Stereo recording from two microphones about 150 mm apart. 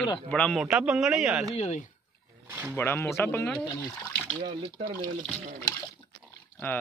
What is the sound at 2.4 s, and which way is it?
Speech, 15° right (ahead or behind).